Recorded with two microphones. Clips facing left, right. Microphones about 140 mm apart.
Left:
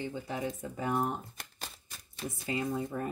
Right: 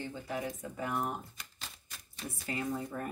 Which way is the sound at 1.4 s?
60° left (ahead or behind).